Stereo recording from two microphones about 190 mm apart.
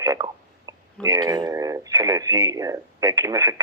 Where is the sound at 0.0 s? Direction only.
20° right (ahead or behind).